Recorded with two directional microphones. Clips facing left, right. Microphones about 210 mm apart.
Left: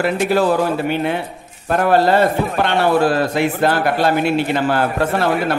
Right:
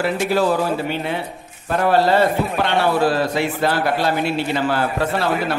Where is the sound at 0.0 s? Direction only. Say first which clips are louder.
Left 2 dB; 55° left (ahead or behind).